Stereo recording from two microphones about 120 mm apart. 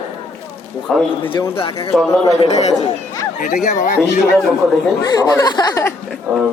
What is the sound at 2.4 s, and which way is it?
Speech, 65° left (ahead or behind).